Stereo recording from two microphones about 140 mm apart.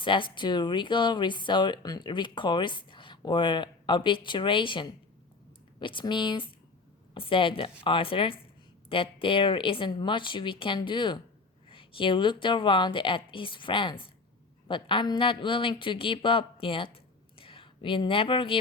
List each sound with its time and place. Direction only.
0.0 s speech: 35° left (ahead or behind)